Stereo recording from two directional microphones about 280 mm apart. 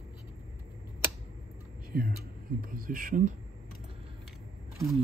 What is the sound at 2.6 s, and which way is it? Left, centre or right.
Speech, right.